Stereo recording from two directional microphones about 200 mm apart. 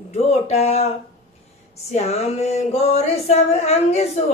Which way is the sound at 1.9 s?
30° left (ahead or behind).